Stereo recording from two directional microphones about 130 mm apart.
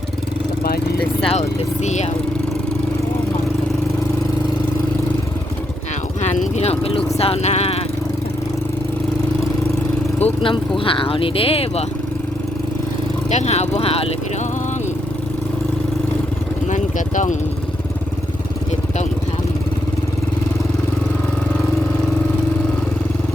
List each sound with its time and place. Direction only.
1.2 s speech: 55° left (ahead or behind)
6.2 s speech: 65° left (ahead or behind)
10.2 s speech: 55° left (ahead or behind)
10.8 s speech: 45° left (ahead or behind)
13.3 s speech: 60° left (ahead or behind)
16.6 s vehicle: 70° left (ahead or behind)